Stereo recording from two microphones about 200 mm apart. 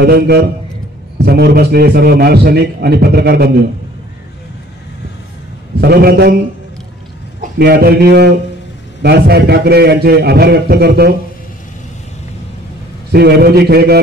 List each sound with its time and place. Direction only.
0.0 s a man's voice: 55° right (ahead or behind)
5.8 s a man's voice: 55° right (ahead or behind)
7.5 s a man's voice: 50° right (ahead or behind)
13.1 s a man's voice: 50° right (ahead or behind)